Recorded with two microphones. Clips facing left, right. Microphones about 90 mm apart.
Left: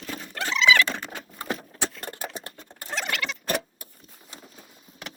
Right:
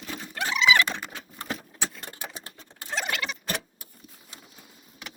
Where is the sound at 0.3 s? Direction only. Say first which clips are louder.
Left 1 dB; 20° right (ahead or behind).